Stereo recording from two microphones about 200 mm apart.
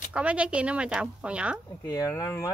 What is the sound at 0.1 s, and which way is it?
Speech, 5° right (ahead or behind).